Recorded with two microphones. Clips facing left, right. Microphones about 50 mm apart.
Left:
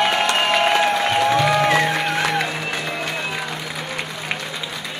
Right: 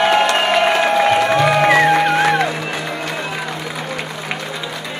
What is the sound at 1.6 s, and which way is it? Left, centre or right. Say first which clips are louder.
Music: right 6 dB; right.